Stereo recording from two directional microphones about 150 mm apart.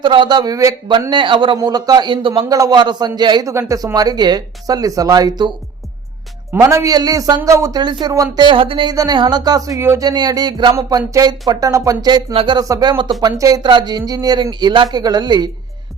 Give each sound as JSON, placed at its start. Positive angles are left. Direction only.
{"t": 0.0, "sound": "a man's voice", "side_deg": -30}
{"t": 6.5, "sound": "a man's voice", "side_deg": -20}